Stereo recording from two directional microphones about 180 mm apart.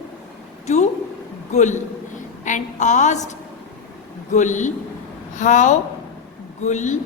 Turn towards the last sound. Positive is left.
turn(degrees=40)  # may be behind; listen again after turning